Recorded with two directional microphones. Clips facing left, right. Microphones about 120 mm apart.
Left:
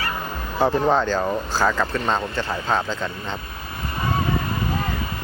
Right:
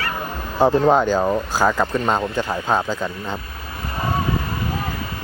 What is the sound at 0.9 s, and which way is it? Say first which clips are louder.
Speech: right 4 dB; 15° right (ahead or behind).